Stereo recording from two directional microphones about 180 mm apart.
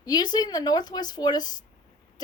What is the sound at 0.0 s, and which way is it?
Speech, 20° left (ahead or behind).